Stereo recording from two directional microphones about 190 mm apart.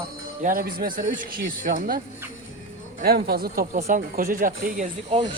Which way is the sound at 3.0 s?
55° right (ahead or behind).